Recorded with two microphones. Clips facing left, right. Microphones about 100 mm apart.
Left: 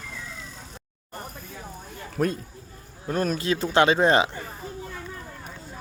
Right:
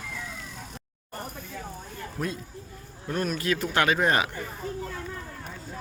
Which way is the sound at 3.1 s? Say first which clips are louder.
Left 3 dB; 35° left (ahead or behind).